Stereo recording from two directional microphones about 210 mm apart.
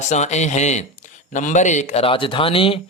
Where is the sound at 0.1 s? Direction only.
35° left (ahead or behind).